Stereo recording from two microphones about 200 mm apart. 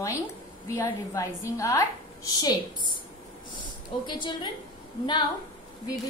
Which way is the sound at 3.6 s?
25° left (ahead or behind).